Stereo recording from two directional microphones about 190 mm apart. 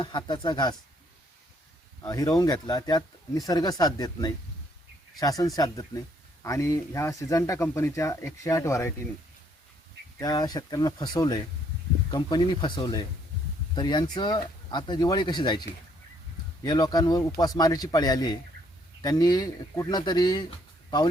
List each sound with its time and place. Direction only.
0.0 s speech: 25° left (ahead or behind)
2.0 s speech: 20° left (ahead or behind)
10.2 s speech: 20° left (ahead or behind)
16.6 s speech: 20° left (ahead or behind)